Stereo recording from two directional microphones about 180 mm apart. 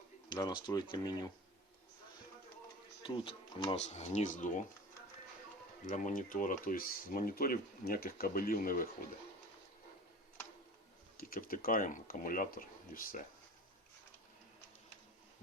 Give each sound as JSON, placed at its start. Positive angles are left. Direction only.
{"t": 0.3, "sound": "speech", "side_deg": 20}
{"t": 3.0, "sound": "speech", "side_deg": 30}
{"t": 5.8, "sound": "speech", "side_deg": 45}
{"t": 11.2, "sound": "speech", "side_deg": 55}